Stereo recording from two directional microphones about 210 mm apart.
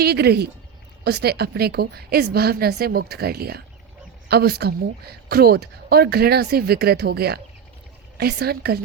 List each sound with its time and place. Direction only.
0.0 s speech: 50° right (ahead or behind)